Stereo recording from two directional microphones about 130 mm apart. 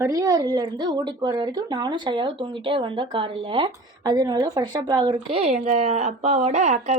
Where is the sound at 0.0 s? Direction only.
25° right (ahead or behind); by 3.7 s 45° right (ahead or behind).